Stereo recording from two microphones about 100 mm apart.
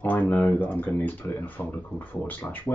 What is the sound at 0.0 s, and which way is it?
Speech, 15° left (ahead or behind).